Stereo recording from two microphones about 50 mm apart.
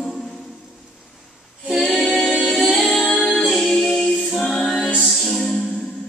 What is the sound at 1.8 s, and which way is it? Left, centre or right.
Music, centre.